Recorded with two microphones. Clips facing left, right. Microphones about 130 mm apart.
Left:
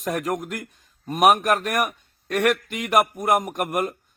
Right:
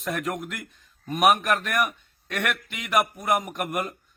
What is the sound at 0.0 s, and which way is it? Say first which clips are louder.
A man's voice: left 4 dB; 45° left (ahead or behind).